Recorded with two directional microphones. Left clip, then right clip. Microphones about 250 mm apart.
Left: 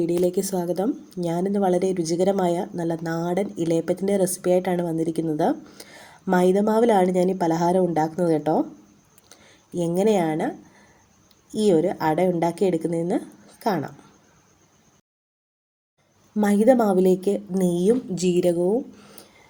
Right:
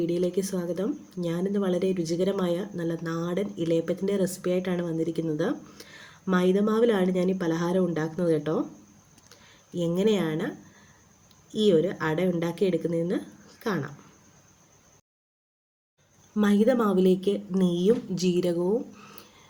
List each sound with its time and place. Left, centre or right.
0.0 s a woman's voice: centre
9.7 s a woman's voice: centre
11.5 s a woman's voice: centre
16.4 s a woman's voice: centre